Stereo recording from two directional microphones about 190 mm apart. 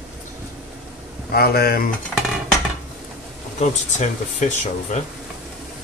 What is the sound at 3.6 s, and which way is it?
Speech, 40° left (ahead or behind).